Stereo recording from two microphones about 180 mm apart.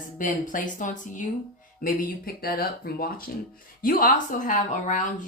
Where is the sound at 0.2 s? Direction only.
45° left (ahead or behind).